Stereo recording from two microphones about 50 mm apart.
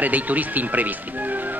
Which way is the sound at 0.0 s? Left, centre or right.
Right.